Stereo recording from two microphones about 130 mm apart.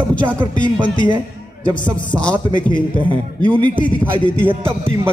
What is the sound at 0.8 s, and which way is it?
Speech, 40° left (ahead or behind).